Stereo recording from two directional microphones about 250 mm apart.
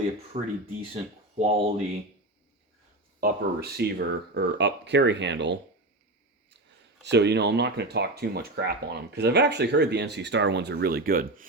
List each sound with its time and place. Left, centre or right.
0.3 s speech: right
3.2 s speech: right
7.0 s speech: right